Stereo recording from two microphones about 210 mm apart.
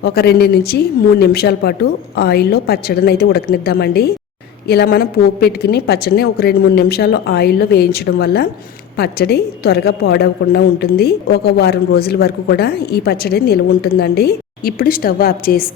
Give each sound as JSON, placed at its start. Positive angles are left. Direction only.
{"t": 0.0, "sound": "a woman's voice", "side_deg": 50}